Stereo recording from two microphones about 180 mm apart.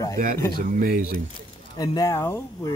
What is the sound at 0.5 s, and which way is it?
Speech, 50° right (ahead or behind).